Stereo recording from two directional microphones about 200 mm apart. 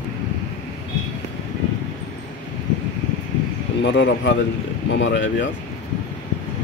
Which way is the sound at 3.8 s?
65° left (ahead or behind).